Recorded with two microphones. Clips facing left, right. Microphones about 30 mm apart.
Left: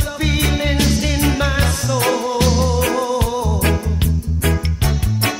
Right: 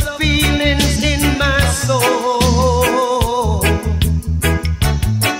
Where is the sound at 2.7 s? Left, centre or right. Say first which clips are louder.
Right 4 dB; right.